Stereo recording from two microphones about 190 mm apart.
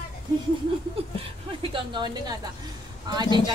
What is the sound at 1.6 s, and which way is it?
A woman's voice, 25° right (ahead or behind).